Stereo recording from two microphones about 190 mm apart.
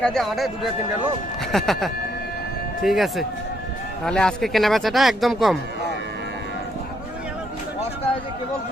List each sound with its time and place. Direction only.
0.0 s speech: centre (ahead or behind)